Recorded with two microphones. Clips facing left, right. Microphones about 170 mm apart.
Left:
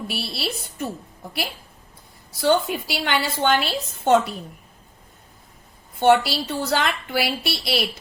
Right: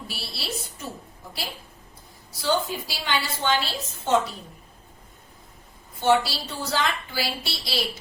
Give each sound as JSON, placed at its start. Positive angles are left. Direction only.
{"t": 0.1, "sound": "a woman's voice", "side_deg": 60}
{"t": 2.4, "sound": "a woman's voice", "side_deg": 60}
{"t": 6.0, "sound": "a woman's voice", "side_deg": 60}